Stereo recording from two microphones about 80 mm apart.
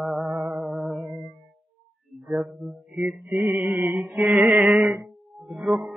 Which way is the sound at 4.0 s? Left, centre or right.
Centre.